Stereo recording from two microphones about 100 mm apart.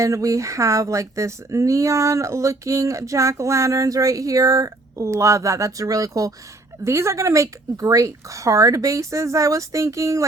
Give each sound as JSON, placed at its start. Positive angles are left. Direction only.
{"t": 0.0, "sound": "speech", "side_deg": -35}